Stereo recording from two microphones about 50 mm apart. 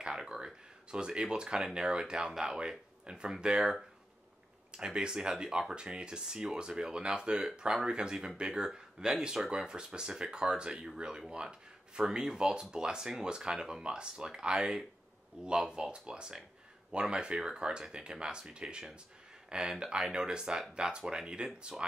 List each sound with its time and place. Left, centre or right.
0.0 s speech: centre
4.7 s speech: centre